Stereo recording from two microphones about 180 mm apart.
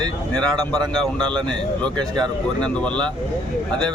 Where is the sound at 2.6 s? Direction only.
5° left (ahead or behind).